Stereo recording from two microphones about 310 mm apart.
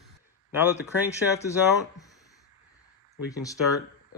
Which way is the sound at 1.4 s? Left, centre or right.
Centre.